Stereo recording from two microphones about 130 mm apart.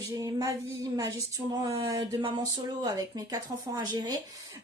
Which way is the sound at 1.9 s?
30° right (ahead or behind).